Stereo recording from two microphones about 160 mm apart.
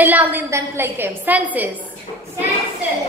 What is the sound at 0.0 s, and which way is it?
A woman's voice, 10° right (ahead or behind).